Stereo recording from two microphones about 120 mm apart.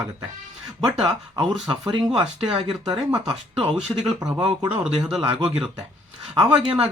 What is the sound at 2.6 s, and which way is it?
Speech, 45° right (ahead or behind).